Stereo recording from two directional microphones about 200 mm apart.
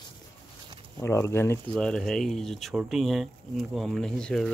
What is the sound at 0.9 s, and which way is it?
Speech, 15° left (ahead or behind).